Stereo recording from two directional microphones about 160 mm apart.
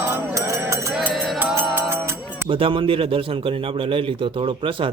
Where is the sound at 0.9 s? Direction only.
Centre (ahead or behind).